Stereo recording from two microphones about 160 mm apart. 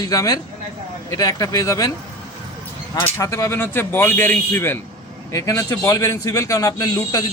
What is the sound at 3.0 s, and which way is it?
A man's voice, 20° left (ahead or behind).